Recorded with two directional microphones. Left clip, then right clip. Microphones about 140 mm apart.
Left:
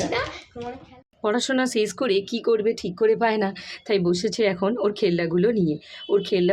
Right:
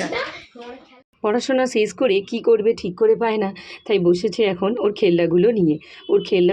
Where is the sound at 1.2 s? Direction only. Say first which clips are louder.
Right 4 dB; 15° right (ahead or behind).